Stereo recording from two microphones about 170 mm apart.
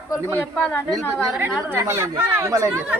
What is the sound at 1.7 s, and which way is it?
Speech, 15° right (ahead or behind).